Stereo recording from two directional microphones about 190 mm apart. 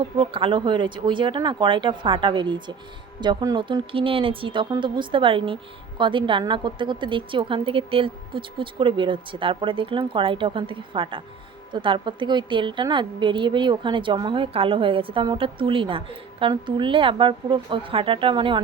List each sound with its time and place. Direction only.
0.2 s a woman's voice: 25° right (ahead or behind)